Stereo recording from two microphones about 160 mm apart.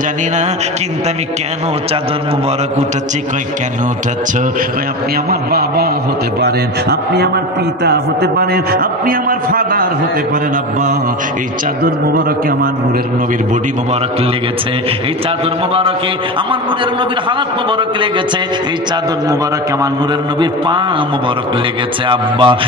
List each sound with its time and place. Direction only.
5.3 s a man's voice: 75° right (ahead or behind)
6.4 s a man's voice: 90° right; by 9.8 s 60° right (ahead or behind)
20.3 s a man's voice: 30° right (ahead or behind)
22.0 s a man's voice: 30° right (ahead or behind)